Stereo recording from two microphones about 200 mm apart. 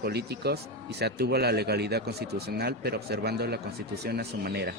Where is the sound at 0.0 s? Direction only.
55° right (ahead or behind).